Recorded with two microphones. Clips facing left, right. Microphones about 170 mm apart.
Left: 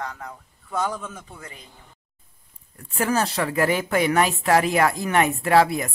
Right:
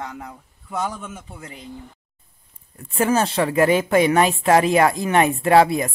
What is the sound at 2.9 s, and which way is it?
A woman's voice, 25° right (ahead or behind).